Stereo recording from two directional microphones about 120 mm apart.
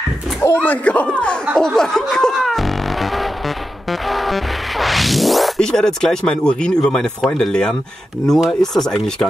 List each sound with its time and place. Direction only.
0.4 s speech: 15° left (ahead or behind)
1.5 s music: 5° left (ahead or behind)
8.3 s speech: 5° left (ahead or behind)